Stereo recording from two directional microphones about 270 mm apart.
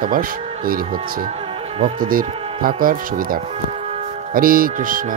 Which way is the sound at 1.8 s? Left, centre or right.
Right.